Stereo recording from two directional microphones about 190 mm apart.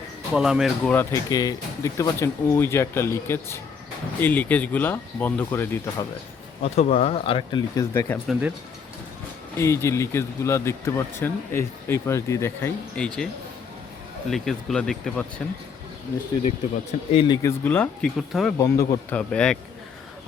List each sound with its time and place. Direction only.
0.3 s speech: 5° right (ahead or behind)
0.9 s speech: 15° left (ahead or behind)
6.6 s speech: 35° left (ahead or behind)
7.9 s speech: 10° left (ahead or behind)
8.3 s speech: 5° right (ahead or behind)
9.6 s speech: 15° left (ahead or behind)
14.3 s speech: centre (ahead or behind)
17.1 s speech: 25° left (ahead or behind)
17.6 s speech: 10° left (ahead or behind)
18.5 s speech: 15° left (ahead or behind)
19.1 s speech: 5° left (ahead or behind)